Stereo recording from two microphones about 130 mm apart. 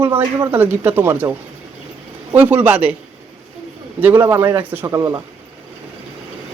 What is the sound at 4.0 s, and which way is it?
Speech, 15° right (ahead or behind).